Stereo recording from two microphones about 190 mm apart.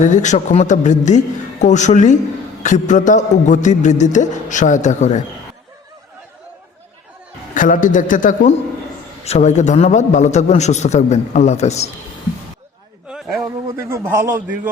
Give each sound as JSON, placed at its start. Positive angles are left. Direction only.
{"t": 0.0, "sound": "a man's voice", "side_deg": 40}
{"t": 7.5, "sound": "a man's voice", "side_deg": 45}
{"t": 13.1, "sound": "a sound", "side_deg": -5}
{"t": 13.7, "sound": "a man's voice", "side_deg": -15}